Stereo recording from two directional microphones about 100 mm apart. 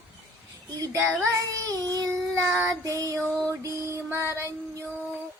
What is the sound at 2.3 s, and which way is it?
Child singing, 20° right (ahead or behind).